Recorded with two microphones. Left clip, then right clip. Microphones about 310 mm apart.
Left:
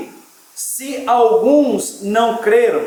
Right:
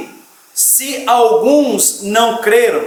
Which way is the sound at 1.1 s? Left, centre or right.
Left.